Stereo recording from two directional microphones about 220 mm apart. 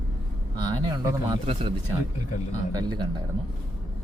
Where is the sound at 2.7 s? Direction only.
20° right (ahead or behind).